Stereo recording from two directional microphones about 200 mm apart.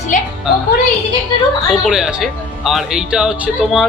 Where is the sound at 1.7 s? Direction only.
Centre (ahead or behind).